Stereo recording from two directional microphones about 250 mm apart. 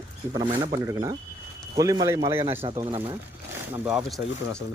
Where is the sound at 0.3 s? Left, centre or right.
Centre.